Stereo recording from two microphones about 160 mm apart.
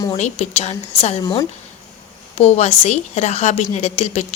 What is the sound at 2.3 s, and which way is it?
Speech, 40° left (ahead or behind).